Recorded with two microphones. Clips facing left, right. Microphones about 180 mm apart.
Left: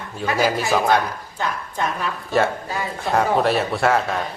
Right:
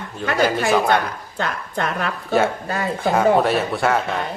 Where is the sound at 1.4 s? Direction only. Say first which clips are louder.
Right 1 dB; 65° right (ahead or behind).